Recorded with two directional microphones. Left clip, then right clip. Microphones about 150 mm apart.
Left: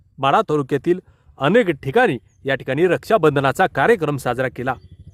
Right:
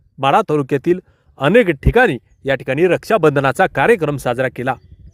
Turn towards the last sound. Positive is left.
turn(degrees=-20)  # may be behind; listen again after turning